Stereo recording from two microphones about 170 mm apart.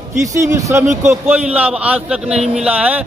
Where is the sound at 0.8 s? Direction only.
45° right (ahead or behind).